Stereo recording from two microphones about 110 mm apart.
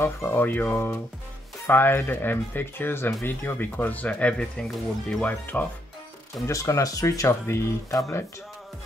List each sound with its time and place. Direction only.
0.0 s speech: 20° left (ahead or behind)
6.4 s speech: 30° left (ahead or behind)